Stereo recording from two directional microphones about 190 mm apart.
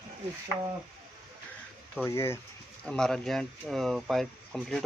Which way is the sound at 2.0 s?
15° left (ahead or behind).